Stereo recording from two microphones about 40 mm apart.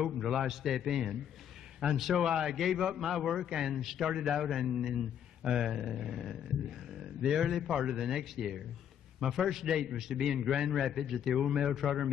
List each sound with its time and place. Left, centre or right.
0.0 s a man's voice: centre
7.7 s a man's voice: centre
11.7 s speech: centre